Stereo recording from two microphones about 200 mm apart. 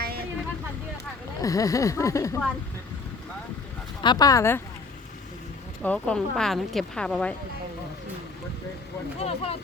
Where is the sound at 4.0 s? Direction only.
20° left (ahead or behind).